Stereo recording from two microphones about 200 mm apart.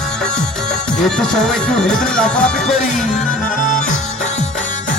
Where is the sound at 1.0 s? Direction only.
5° left (ahead or behind).